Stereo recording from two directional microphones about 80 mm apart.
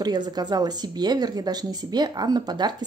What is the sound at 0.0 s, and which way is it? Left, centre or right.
Speech, right.